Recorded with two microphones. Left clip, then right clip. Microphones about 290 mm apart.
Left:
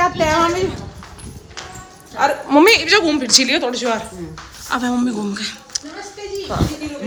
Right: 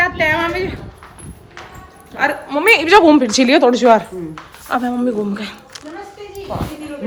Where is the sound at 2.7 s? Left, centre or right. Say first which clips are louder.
Right 4 dB; centre.